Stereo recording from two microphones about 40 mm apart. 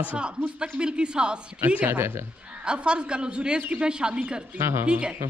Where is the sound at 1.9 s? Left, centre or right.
Right.